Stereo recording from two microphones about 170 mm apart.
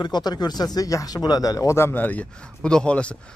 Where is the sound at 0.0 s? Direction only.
25° left (ahead or behind).